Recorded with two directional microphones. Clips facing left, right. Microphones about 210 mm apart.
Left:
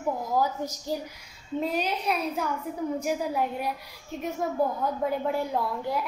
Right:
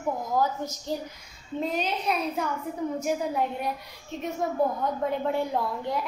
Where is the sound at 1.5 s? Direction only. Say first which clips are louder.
Left 1 dB; 5° left (ahead or behind).